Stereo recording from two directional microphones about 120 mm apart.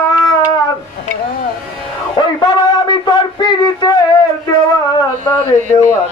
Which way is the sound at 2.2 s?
35° left (ahead or behind).